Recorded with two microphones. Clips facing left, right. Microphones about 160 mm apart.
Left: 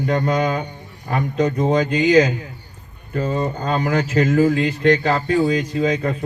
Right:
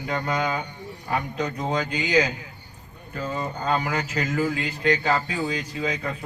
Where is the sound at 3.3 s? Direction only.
35° left (ahead or behind).